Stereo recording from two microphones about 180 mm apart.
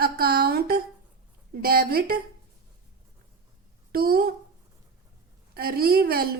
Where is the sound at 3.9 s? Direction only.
55° right (ahead or behind).